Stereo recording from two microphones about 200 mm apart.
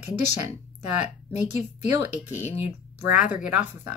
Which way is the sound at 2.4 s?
30° left (ahead or behind).